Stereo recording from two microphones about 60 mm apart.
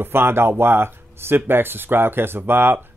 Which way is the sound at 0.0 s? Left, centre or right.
Right.